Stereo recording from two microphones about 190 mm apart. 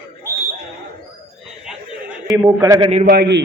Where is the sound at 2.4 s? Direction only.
20° right (ahead or behind).